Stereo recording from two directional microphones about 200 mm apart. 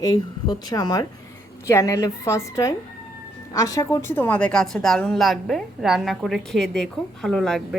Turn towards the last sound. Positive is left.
turn(degrees=0)  # may be behind; listen again after turning